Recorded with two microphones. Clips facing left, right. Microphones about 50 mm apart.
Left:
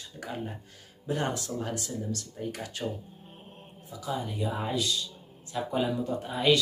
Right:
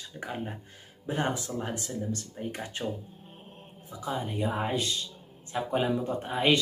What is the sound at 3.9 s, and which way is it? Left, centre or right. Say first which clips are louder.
Speech: even; right.